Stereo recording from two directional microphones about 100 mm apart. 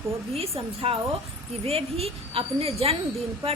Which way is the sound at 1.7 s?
80° right.